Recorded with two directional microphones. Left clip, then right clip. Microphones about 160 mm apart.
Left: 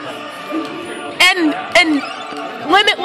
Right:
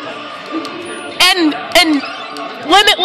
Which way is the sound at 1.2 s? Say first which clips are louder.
Right 1 dB; 5° right (ahead or behind).